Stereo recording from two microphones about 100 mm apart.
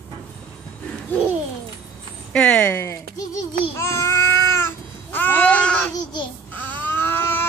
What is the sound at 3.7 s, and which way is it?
Child singing, 25° left (ahead or behind).